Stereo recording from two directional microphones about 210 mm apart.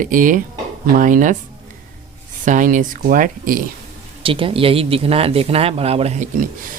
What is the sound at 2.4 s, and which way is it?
Speech, 35° right (ahead or behind).